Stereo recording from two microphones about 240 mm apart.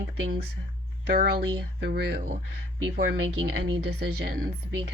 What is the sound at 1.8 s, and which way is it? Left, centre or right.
Speech, right.